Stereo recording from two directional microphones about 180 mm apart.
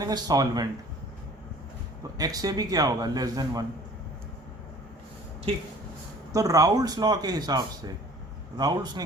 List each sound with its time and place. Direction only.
0.0 s speech: 20° right (ahead or behind)
2.1 s speech: 20° right (ahead or behind)
6.3 s speech: 20° right (ahead or behind)